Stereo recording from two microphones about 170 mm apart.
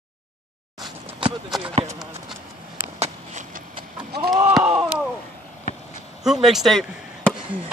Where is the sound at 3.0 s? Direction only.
45° right (ahead or behind).